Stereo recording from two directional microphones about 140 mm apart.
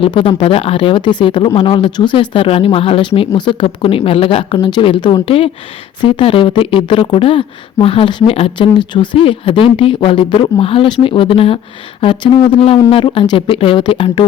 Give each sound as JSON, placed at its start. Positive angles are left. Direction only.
{"t": 0.0, "sound": "speech", "side_deg": 40}